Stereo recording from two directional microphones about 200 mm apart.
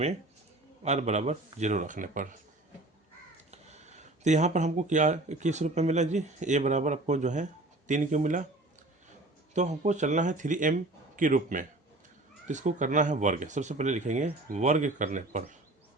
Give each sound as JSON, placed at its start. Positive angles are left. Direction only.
{"t": 0.8, "sound": "speech", "side_deg": -35}
{"t": 3.5, "sound": "speech", "side_deg": -35}
{"t": 9.6, "sound": "speech", "side_deg": -35}